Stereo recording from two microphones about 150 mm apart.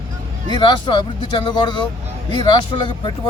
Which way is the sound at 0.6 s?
30° left (ahead or behind).